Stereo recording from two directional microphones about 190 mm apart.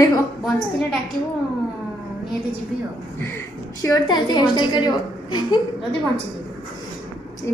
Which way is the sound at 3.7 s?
20° left (ahead or behind).